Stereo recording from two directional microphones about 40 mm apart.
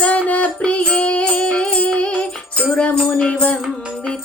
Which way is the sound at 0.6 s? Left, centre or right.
Left.